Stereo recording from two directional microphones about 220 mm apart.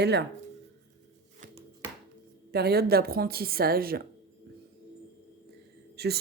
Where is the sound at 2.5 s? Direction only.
45° right (ahead or behind).